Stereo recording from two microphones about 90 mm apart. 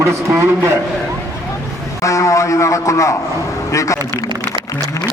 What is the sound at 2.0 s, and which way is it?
Speech, 35° left (ahead or behind).